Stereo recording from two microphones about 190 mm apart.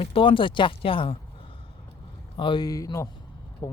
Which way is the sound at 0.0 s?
25° left (ahead or behind).